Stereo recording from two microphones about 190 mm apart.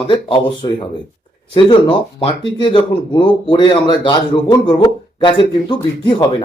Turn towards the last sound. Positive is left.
turn(degrees=25)  # may be behind; listen again after turning